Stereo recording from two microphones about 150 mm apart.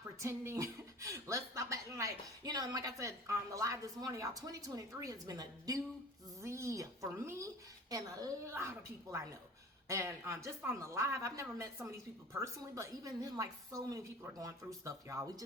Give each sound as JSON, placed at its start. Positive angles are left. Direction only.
{"t": 0.2, "sound": "speech", "side_deg": -20}